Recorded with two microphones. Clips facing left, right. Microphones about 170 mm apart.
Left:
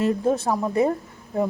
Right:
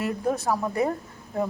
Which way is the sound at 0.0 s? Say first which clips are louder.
Left 5 dB; 25° left (ahead or behind).